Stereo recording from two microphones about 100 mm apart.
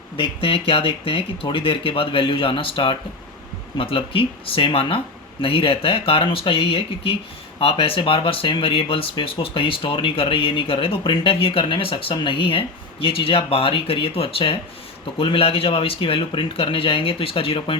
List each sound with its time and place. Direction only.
0.2 s speech: 65° left (ahead or behind)